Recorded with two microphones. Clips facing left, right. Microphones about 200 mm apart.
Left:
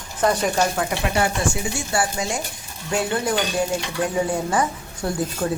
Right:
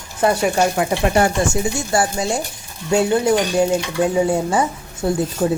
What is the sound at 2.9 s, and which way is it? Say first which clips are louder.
Speech: right 7 dB; 25° right (ahead or behind).